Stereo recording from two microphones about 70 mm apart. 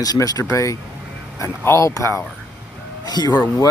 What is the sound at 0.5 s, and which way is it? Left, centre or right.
Speech, left.